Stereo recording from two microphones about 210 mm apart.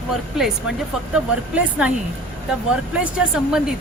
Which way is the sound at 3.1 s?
5° right (ahead or behind).